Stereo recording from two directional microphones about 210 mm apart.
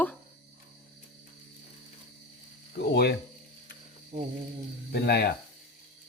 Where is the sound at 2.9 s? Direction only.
50° left (ahead or behind).